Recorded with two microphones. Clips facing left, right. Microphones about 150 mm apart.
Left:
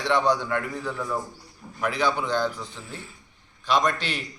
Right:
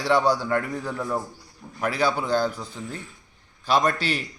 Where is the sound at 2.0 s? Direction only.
10° right (ahead or behind).